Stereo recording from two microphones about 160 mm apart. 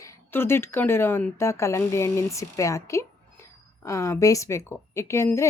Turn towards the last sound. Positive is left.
turn(degrees=15)  # may be behind; listen again after turning